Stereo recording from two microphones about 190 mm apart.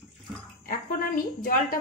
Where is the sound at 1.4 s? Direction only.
45° left (ahead or behind).